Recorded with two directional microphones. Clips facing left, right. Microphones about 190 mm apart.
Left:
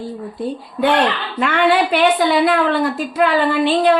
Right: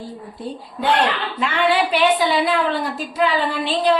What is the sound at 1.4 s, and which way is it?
A woman's voice, 55° left (ahead or behind).